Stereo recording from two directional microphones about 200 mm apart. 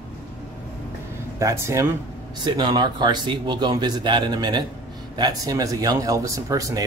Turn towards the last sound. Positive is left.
turn(degrees=-15)  # may be behind; listen again after turning